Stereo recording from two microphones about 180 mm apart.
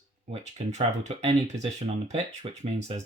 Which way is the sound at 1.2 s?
35° right (ahead or behind).